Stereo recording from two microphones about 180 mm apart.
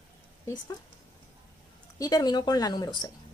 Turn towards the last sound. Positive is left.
turn(degrees=25)  # may be behind; listen again after turning